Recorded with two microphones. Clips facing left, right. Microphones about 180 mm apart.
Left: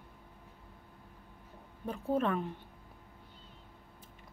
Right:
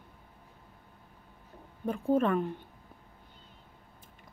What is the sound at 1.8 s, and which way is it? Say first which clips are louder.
Speech: right 5 dB; 5° right (ahead or behind).